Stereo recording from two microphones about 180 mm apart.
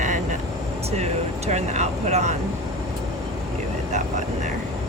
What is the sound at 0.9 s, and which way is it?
Speech, 35° right (ahead or behind).